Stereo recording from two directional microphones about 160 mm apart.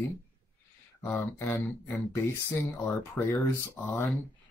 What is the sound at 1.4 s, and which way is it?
Speech, 15° left (ahead or behind).